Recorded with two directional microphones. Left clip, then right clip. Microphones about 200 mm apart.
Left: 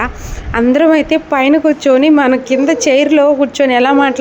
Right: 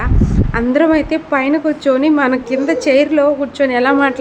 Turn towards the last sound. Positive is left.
turn(degrees=15)  # may be behind; listen again after turning